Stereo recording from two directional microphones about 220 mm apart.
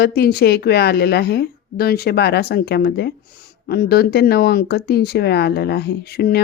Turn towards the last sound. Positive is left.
turn(degrees=45)  # may be behind; listen again after turning